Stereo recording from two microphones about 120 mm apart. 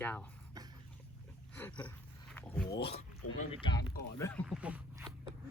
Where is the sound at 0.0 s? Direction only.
15° left (ahead or behind).